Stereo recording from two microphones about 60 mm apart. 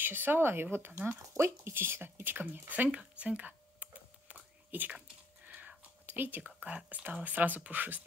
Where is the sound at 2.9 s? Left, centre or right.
Right.